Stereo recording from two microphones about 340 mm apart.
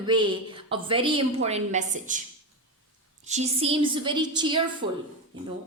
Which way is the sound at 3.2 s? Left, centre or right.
Centre.